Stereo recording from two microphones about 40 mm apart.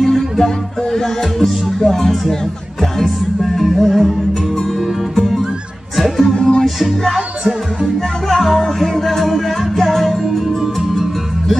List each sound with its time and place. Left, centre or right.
0.0 s music: centre
2.8 s music: centre
5.9 s speech: centre
6.3 s music: left
6.6 s music: centre
8.3 s music: centre